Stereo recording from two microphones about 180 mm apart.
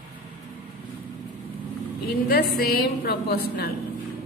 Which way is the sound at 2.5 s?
60° left (ahead or behind).